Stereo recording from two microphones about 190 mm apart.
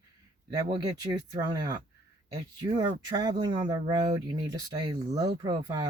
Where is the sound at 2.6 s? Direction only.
20° right (ahead or behind).